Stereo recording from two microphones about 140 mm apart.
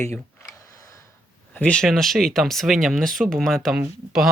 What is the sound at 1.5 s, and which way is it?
Speech, 10° left (ahead or behind).